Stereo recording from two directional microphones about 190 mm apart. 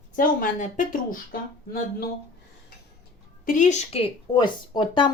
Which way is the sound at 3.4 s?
45° left (ahead or behind).